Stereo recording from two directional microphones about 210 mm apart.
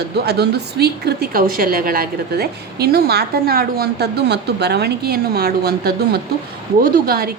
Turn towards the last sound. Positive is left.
turn(degrees=-45)  # may be behind; listen again after turning